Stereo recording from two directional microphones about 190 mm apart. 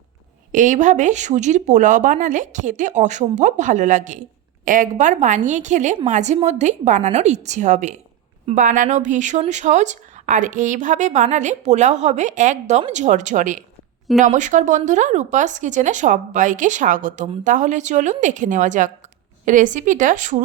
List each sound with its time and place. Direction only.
0.5 s a woman's voice: 40° right (ahead or behind)